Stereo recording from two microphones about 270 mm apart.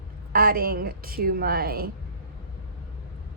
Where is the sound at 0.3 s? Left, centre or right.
Right.